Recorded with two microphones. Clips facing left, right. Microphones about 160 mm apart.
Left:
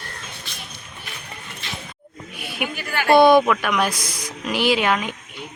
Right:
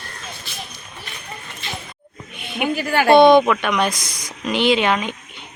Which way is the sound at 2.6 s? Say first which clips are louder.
Right 4 dB; 30° right (ahead or behind).